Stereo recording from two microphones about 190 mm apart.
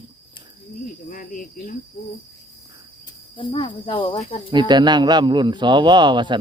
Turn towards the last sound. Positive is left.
turn(degrees=-25)  # may be behind; listen again after turning